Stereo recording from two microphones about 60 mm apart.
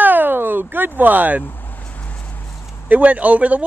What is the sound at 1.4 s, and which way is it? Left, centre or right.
Vehicle, left.